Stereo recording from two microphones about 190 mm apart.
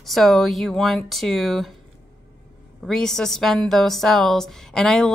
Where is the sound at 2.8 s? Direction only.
Centre (ahead or behind).